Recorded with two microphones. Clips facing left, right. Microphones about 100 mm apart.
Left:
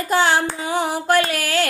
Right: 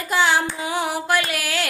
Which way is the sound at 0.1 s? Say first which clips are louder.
Left 1 dB; 40° left (ahead or behind).